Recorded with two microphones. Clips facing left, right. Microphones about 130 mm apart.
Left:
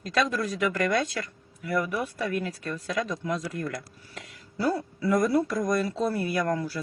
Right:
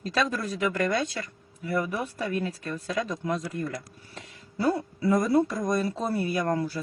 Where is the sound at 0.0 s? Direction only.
30° right (ahead or behind).